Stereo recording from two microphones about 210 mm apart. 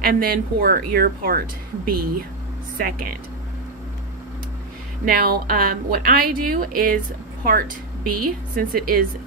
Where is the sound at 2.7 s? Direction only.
45° right (ahead or behind).